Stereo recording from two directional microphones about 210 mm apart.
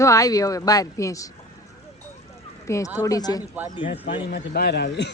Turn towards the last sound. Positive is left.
turn(degrees=55)  # may be behind; listen again after turning